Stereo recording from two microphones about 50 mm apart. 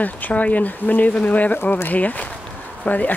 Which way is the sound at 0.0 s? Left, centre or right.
Left.